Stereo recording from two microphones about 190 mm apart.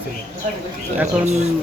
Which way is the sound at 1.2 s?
35° right (ahead or behind).